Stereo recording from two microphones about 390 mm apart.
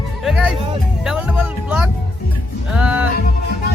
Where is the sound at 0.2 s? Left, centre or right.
Centre.